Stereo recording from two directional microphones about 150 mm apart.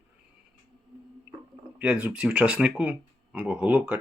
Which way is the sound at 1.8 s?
10° right (ahead or behind).